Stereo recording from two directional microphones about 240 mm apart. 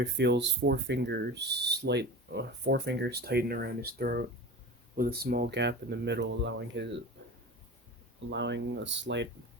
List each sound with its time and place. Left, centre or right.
0.0 s speech: right
8.3 s speech: right